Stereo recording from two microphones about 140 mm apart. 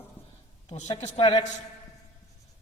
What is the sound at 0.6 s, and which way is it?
Speech, 55° left (ahead or behind).